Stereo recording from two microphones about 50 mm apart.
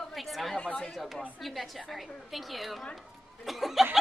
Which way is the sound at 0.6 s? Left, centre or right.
Centre.